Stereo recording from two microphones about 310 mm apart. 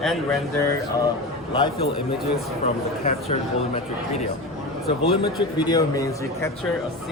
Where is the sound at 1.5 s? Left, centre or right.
Centre.